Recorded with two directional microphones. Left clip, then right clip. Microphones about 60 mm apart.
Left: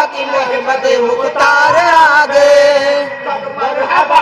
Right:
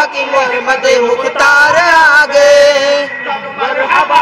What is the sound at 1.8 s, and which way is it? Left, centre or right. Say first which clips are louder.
Chant: right 1 dB; centre.